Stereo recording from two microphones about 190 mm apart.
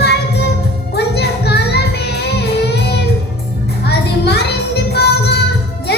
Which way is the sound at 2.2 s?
60° left (ahead or behind).